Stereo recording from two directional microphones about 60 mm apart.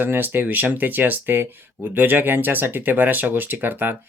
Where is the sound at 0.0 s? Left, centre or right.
Right.